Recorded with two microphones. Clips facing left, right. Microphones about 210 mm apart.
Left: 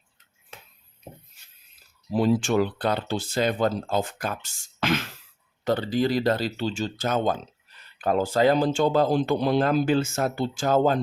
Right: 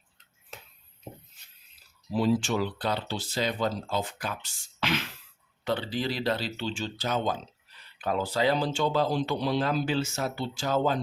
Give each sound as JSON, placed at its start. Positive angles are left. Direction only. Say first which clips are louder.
{"t": 2.1, "sound": "speech", "louder": "left 4 dB", "side_deg": 50}